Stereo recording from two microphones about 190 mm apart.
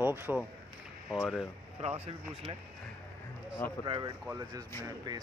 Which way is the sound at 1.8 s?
35° right (ahead or behind).